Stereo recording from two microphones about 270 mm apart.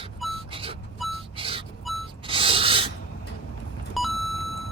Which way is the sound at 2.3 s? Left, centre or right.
Centre.